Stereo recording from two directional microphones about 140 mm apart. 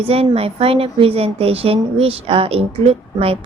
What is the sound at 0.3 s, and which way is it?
Speech, 45° right (ahead or behind).